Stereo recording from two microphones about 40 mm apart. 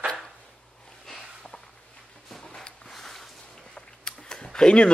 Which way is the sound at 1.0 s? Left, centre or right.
Centre.